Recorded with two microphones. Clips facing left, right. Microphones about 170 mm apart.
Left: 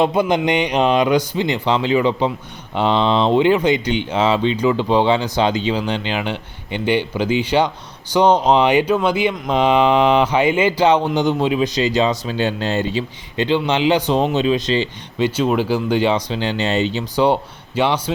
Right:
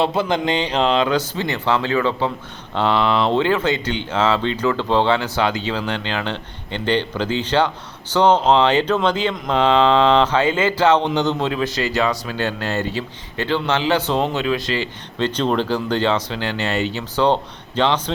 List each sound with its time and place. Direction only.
0.0 s speech: 15° left (ahead or behind)
15.3 s speech: 10° left (ahead or behind)